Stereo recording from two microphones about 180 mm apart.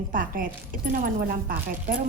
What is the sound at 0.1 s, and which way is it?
Speech, 50° right (ahead or behind).